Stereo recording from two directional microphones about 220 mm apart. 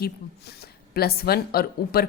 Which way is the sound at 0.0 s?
45° left (ahead or behind).